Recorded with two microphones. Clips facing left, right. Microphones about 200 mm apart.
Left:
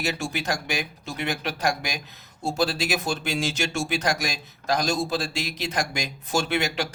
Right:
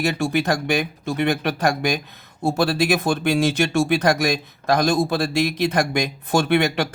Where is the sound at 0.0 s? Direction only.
55° right (ahead or behind).